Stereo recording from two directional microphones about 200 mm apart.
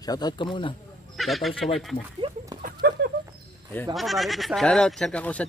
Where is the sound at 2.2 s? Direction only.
25° right (ahead or behind).